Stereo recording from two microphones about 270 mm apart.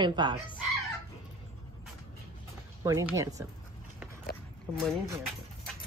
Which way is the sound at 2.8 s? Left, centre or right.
Centre.